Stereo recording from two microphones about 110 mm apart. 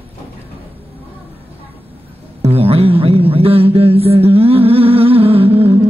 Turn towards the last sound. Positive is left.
turn(degrees=-60)  # may be behind; listen again after turning